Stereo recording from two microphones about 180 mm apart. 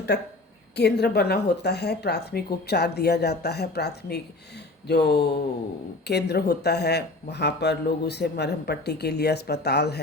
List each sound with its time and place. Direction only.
0.1 s a woman's voice: 70° left (ahead or behind)